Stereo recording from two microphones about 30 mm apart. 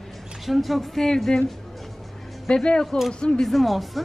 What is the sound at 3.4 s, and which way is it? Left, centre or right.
Speech, centre.